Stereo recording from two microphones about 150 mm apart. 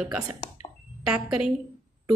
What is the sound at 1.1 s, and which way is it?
Speech, 5° right (ahead or behind).